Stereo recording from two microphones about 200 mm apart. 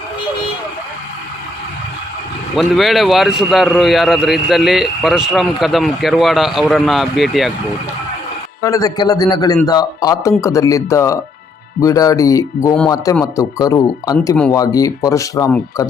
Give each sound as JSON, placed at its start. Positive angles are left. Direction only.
{"t": 2.6, "sound": "a man's voice", "side_deg": 0}
{"t": 8.6, "sound": "a man's voice", "side_deg": 15}